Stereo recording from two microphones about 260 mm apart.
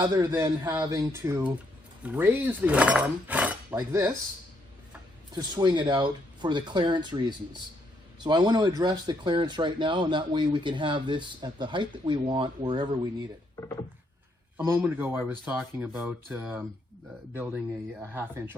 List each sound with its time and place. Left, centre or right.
0.0 s speech: centre
5.3 s speech: centre
14.7 s speech: centre
18.0 s speech: centre